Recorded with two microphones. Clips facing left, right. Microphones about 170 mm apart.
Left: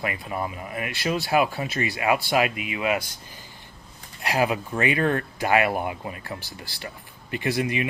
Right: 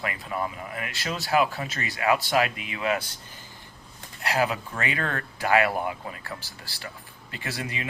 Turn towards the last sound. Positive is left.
turn(degrees=15)  # may be behind; listen again after turning